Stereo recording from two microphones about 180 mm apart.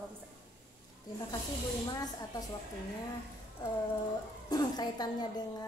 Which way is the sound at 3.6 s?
25° left (ahead or behind).